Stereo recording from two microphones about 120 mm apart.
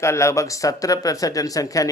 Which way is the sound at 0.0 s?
25° left (ahead or behind).